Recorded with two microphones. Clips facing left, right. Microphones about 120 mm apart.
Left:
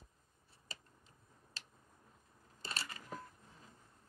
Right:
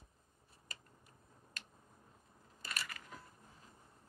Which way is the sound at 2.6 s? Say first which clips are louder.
Left 1 dB; 25° left (ahead or behind).